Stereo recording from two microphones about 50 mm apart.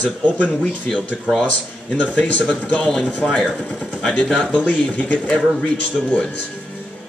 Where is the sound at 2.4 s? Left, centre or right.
Centre.